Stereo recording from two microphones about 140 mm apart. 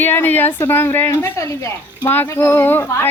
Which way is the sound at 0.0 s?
15° left (ahead or behind).